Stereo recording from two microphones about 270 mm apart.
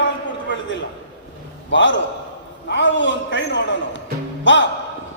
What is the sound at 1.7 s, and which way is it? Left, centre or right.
A man's voice, left.